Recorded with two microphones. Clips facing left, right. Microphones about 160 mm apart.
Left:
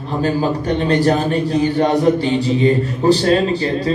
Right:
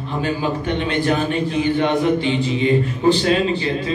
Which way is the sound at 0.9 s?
40° left (ahead or behind).